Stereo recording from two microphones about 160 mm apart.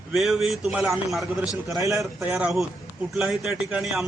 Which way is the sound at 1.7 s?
20° right (ahead or behind).